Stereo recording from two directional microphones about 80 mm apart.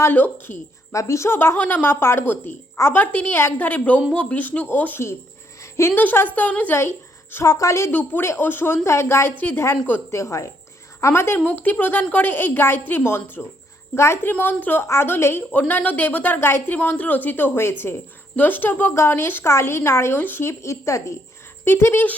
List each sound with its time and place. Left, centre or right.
0.0 s a woman's voice: left
0.9 s a woman's voice: left
1.5 s a woman's voice: left
5.7 s a woman's voice: left
6.0 s a woman's voice: left
6.7 s a sound: left
7.4 s a woman's voice: left
7.9 s a woman's voice: left
10.1 s a woman's voice: left
11.3 s a woman's voice: left
21.6 s speech: left